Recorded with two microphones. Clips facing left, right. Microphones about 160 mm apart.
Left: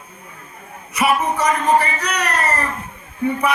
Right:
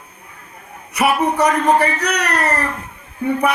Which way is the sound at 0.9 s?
65° right (ahead or behind).